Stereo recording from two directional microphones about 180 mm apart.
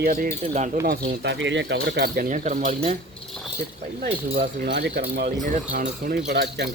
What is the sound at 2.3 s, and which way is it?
Speech, 45° right (ahead or behind).